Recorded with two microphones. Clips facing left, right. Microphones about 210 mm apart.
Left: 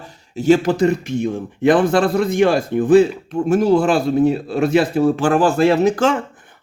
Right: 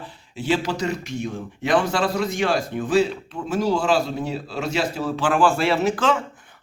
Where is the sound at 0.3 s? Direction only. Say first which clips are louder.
Left 9 dB; 45° left (ahead or behind).